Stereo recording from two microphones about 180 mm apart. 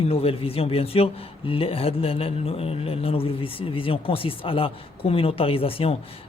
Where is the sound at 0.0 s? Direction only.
30° left (ahead or behind).